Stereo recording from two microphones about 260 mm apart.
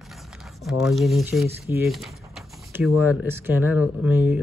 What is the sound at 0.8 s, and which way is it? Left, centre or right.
Speech, centre.